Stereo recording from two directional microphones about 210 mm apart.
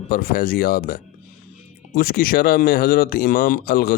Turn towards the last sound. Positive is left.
turn(degrees=45)  # may be behind; listen again after turning